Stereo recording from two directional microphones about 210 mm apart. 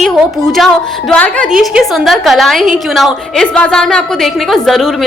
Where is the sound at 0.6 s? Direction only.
Centre (ahead or behind).